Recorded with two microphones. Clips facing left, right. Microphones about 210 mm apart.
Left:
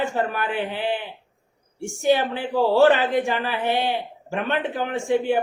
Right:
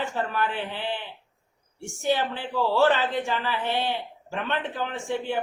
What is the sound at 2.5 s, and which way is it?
Mantra, 45° left (ahead or behind).